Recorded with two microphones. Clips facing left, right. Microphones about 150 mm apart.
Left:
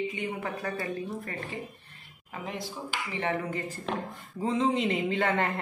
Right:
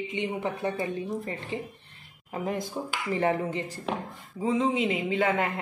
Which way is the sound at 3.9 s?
10° right (ahead or behind).